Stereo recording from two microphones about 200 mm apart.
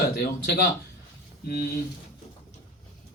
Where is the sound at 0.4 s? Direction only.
50° left (ahead or behind).